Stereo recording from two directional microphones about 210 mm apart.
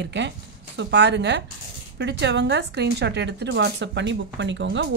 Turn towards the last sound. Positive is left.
turn(degrees=-60)  # may be behind; listen again after turning